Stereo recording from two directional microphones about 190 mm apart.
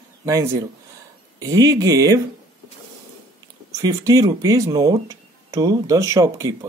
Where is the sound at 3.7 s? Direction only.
15° right (ahead or behind).